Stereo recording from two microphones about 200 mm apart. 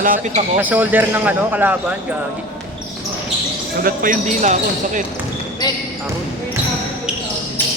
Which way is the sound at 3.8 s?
45° right (ahead or behind).